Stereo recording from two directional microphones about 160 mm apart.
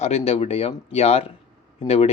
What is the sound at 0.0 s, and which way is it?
Speech, 40° left (ahead or behind).